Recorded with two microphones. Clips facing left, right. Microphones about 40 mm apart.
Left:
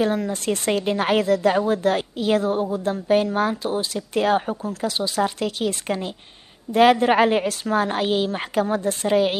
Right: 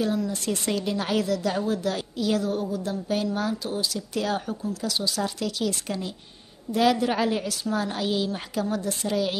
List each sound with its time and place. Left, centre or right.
0.0 s speech: left